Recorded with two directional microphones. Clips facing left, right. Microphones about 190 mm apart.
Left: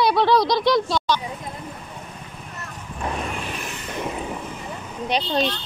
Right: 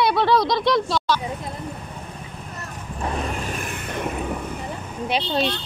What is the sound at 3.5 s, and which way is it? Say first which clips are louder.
Vehicle: right 2 dB; 50° right (ahead or behind).